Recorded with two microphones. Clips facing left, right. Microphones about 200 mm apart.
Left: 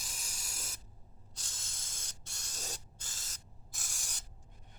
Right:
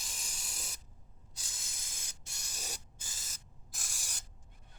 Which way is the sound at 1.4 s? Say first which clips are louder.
Even; 10° right (ahead or behind).